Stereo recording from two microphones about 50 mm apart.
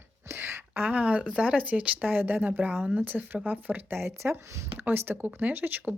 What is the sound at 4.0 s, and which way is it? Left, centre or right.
Speech, right.